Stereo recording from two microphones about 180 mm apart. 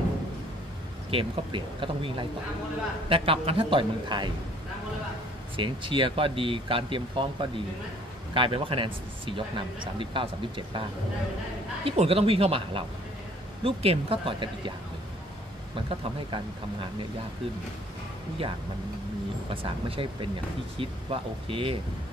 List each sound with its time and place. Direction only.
1.1 s a man's voice: 30° right (ahead or behind)
5.6 s a man's voice: 30° right (ahead or behind)
11.8 s a man's voice: 30° right (ahead or behind)
15.7 s a man's voice: 30° right (ahead or behind)
19.5 s a man's voice: 30° right (ahead or behind)